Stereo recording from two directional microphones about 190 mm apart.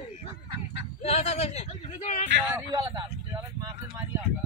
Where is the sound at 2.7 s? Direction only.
20° right (ahead or behind).